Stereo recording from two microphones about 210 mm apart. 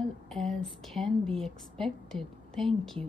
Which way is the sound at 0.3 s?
Centre (ahead or behind).